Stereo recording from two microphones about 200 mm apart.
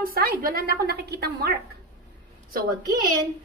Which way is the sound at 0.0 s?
50° right (ahead or behind).